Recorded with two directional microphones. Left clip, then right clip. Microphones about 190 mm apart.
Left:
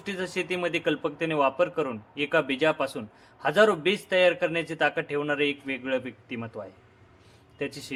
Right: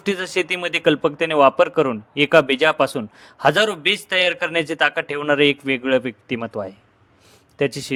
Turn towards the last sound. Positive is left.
turn(degrees=-40)  # may be behind; listen again after turning